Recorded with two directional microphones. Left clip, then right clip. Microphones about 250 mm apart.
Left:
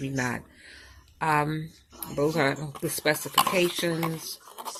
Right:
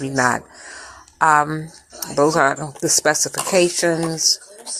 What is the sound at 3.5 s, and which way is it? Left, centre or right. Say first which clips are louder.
Speech: right 9 dB; right.